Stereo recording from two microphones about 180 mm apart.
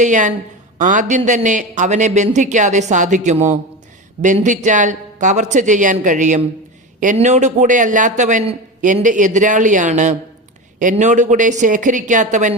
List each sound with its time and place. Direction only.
0.0 s a man's voice: 45° right (ahead or behind)